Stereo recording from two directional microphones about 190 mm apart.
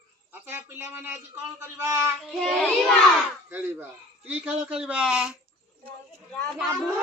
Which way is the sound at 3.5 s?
10° right (ahead or behind).